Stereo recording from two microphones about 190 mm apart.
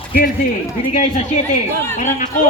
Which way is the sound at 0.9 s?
40° left (ahead or behind).